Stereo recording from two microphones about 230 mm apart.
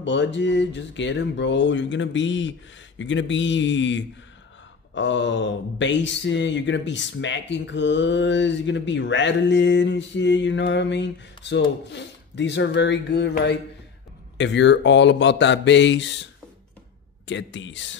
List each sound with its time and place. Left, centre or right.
0.0 s speech: left
17.3 s speech: left